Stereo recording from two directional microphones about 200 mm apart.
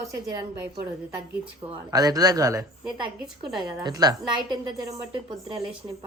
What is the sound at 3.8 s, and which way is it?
Speech, 20° right (ahead or behind).